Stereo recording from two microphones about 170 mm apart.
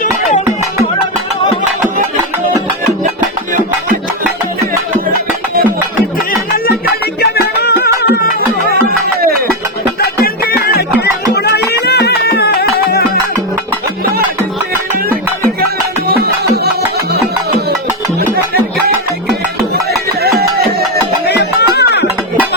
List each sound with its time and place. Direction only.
7.2 s music: 70° left (ahead or behind)
10.0 s music: 65° left (ahead or behind)
16.0 s music: 65° right (ahead or behind)
20.6 s music: 65° right (ahead or behind)
21.2 s music: 75° left (ahead or behind)